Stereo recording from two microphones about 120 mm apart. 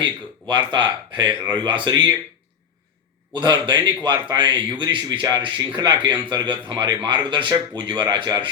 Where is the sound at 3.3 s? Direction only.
40° right (ahead or behind).